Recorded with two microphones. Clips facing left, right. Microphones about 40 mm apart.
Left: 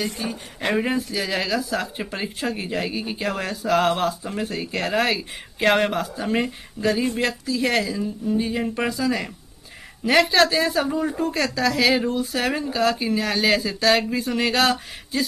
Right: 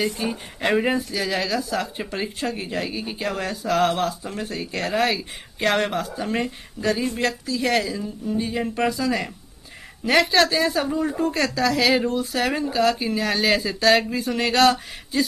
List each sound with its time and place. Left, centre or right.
0.2 s speech: centre
0.7 s speech: centre